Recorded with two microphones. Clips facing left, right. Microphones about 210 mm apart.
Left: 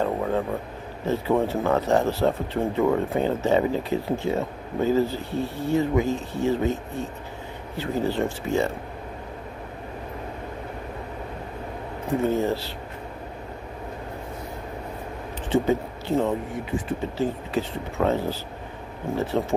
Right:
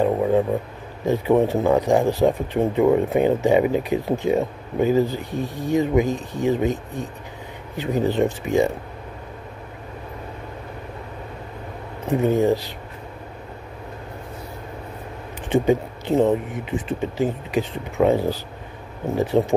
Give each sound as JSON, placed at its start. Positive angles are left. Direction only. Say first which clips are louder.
{"t": 0.0, "sound": "a sound", "louder": "right 6 dB", "side_deg": -15}
{"t": 1.0, "sound": "speech", "louder": "right 5 dB", "side_deg": -15}
{"t": 12.2, "sound": "speech", "louder": "right 5 dB", "side_deg": -15}
{"t": 15.5, "sound": "speech", "louder": "right 3 dB", "side_deg": -15}